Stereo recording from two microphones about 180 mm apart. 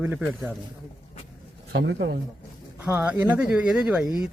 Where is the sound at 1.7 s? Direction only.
70° right (ahead or behind).